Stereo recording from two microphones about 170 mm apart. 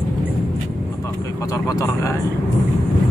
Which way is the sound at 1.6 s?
20° left (ahead or behind).